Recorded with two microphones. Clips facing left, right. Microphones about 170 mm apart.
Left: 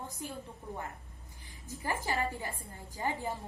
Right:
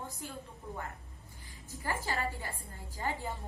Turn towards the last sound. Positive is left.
turn(degrees=15)  # may be behind; listen again after turning